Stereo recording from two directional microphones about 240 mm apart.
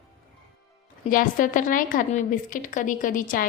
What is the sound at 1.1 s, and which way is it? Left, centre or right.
A woman's voice, left.